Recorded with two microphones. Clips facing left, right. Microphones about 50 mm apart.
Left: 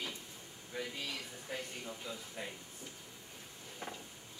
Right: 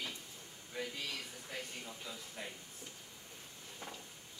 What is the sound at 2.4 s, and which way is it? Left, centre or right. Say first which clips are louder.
Speech: left 2 dB; centre.